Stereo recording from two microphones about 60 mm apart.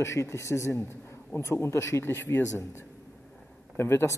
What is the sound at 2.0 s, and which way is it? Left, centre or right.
Speech, left.